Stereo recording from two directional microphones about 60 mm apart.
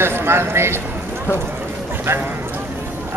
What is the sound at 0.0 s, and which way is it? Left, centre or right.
Speech, right.